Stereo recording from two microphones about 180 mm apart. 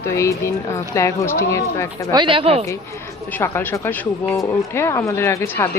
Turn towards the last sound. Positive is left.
turn(degrees=15)  # may be behind; listen again after turning